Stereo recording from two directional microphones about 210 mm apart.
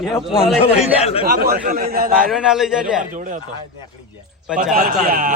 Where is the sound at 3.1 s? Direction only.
40° right (ahead or behind).